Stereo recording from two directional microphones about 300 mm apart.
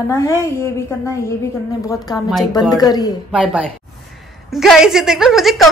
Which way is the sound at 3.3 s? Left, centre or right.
Centre.